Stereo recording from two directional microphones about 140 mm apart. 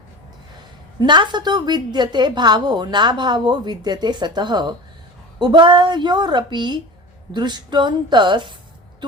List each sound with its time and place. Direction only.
0.9 s a woman's voice: 35° right (ahead or behind)